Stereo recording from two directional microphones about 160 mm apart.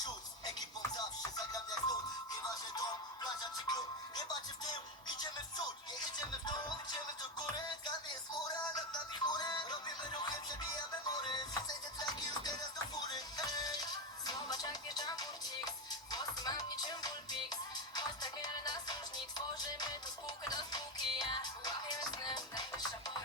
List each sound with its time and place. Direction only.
0.8 s music: 25° left (ahead or behind)